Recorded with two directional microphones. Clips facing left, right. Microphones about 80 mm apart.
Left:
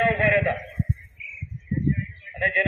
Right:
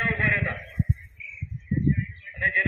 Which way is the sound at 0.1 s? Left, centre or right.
Right.